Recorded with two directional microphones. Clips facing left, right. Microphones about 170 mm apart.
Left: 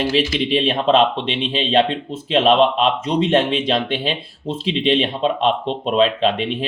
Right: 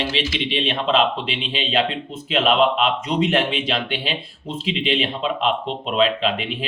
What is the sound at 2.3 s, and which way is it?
Speech, 35° left (ahead or behind).